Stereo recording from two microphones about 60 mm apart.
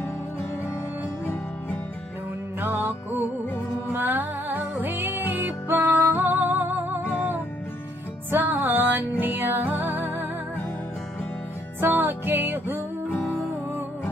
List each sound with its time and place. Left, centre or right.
2.6 s music: right
11.8 s music: right